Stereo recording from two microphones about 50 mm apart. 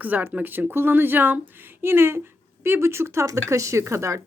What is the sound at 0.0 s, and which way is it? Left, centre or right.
Speech, right.